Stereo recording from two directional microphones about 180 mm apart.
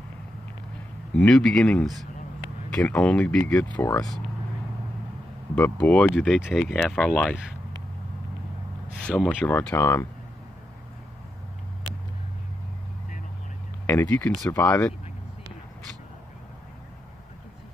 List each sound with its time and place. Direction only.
1.1 s speech: 5° left (ahead or behind)
3.7 s speech: 15° left (ahead or behind)
5.6 s speech: 5° left (ahead or behind)
9.0 s speech: 5° left (ahead or behind)
13.8 s speech: 15° left (ahead or behind)
14.2 s speech: centre (ahead or behind)
14.5 s speech: 15° left (ahead or behind)